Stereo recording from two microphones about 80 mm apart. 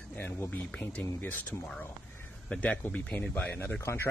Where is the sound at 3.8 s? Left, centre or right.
Left.